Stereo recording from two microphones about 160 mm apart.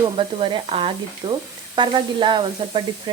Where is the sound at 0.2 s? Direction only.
30° right (ahead or behind).